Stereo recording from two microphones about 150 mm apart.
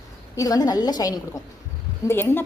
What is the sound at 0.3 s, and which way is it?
Speech, 25° left (ahead or behind).